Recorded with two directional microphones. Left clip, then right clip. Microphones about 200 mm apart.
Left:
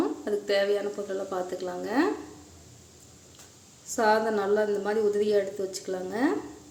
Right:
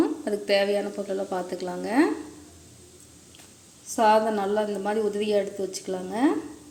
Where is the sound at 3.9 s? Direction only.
Centre (ahead or behind).